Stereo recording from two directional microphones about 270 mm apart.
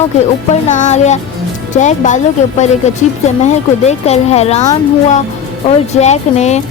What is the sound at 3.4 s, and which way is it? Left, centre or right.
Speech, left.